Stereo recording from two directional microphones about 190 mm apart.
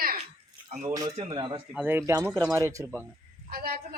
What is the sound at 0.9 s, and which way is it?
Speech, 20° right (ahead or behind).